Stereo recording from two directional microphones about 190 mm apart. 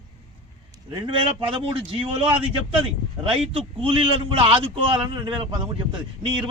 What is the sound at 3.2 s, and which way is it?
A man's voice, 30° right (ahead or behind).